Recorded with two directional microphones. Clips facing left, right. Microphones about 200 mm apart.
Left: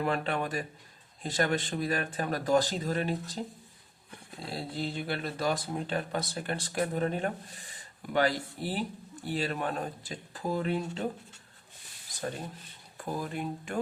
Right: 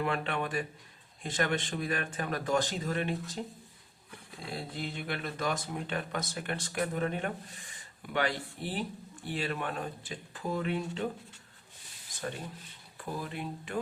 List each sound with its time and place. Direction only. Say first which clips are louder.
0.0 s speech: left 2 dB; 40° left (ahead or behind)
4.4 s speech: left 3 dB; 35° left (ahead or behind)
13.0 s speech: left 3 dB; 45° left (ahead or behind)